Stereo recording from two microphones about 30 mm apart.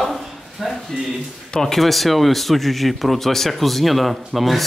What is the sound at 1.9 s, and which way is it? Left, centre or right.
Speech, centre.